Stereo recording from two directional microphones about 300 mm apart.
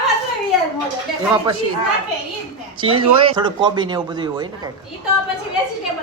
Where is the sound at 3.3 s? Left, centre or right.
Centre.